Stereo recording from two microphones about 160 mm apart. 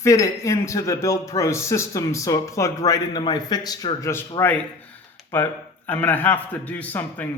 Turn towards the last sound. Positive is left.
turn(degrees=10)  # may be behind; listen again after turning